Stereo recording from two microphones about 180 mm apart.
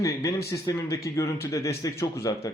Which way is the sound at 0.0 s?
20° left (ahead or behind).